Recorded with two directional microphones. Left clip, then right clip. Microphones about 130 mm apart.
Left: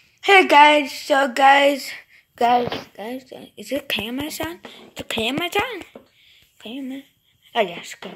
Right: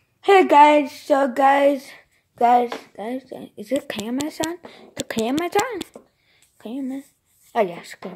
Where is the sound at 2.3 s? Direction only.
10° right (ahead or behind).